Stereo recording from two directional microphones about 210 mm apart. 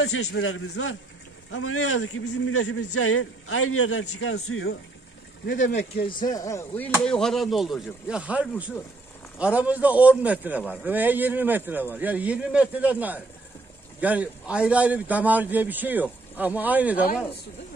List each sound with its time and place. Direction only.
0.0 s a man's voice: 85° left
0.4 s a man's voice: 75° left (ahead or behind)
1.5 s a man's voice: 85° left
5.5 s speech: 55° left (ahead or behind)
6.0 s a man's voice: 20° left (ahead or behind); by 12.9 s 5° right (ahead or behind)
14.0 s a man's voice: 5° right (ahead or behind)